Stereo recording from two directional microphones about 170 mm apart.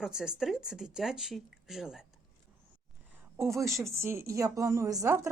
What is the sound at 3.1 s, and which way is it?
Speech, 15° right (ahead or behind).